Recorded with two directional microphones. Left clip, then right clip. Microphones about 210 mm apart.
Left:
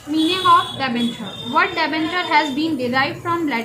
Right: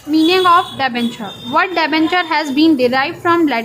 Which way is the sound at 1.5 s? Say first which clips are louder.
Right 4 dB; 50° right (ahead or behind).